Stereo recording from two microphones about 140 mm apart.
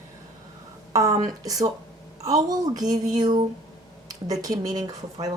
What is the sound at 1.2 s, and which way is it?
Speech, 25° right (ahead or behind).